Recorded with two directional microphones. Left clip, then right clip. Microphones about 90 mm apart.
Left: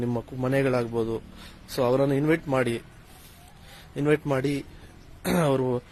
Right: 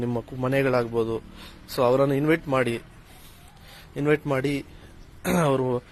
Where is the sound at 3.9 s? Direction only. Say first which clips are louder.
Right 1 dB; 30° left (ahead or behind).